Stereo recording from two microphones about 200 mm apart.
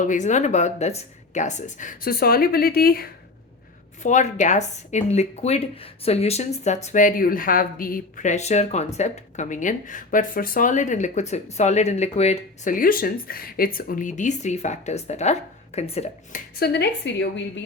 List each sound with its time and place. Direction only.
0.0 s speech: 40° left (ahead or behind)
4.0 s speech: 35° left (ahead or behind)
16.6 s a woman's voice: 55° left (ahead or behind)